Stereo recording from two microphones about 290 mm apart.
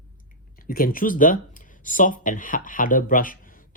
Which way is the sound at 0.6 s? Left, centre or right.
Left.